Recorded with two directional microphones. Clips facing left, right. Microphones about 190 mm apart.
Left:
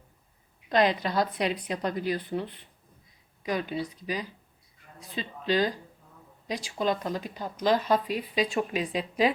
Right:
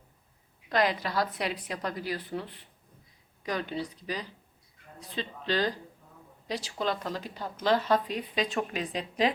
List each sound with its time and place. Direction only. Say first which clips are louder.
0.7 s a woman's voice: left 3 dB; 20° left (ahead or behind)